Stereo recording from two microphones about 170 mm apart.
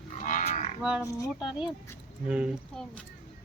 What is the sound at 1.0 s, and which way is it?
Speech, 20° left (ahead or behind).